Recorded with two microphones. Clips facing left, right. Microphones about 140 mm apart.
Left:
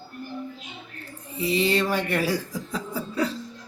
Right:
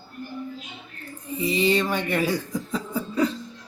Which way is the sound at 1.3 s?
Centre (ahead or behind).